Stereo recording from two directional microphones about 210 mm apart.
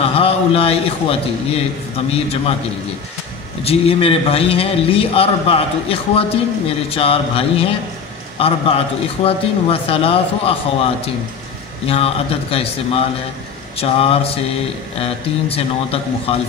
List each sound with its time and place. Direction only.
0.0 s a man's voice: 25° left (ahead or behind)
3.6 s a man's voice: 30° left (ahead or behind)
11.9 s a man's voice: 25° left (ahead or behind)